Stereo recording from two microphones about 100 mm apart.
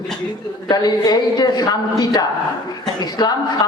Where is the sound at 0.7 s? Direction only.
40° left (ahead or behind).